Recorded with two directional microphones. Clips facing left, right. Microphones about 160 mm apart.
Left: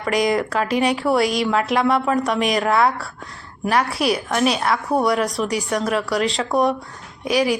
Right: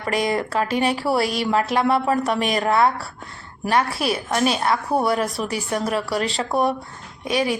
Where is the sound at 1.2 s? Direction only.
Centre (ahead or behind).